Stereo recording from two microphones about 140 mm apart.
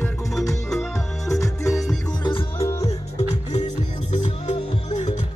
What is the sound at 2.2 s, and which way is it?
Music, 35° left (ahead or behind).